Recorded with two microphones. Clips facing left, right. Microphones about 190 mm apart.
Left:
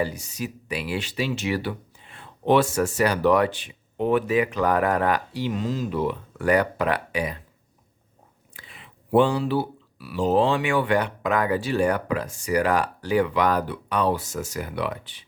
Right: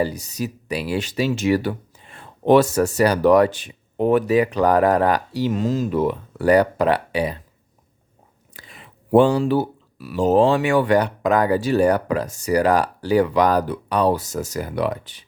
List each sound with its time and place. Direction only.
0.0 s speech: 40° right (ahead or behind)
8.5 s speech: 45° right (ahead or behind)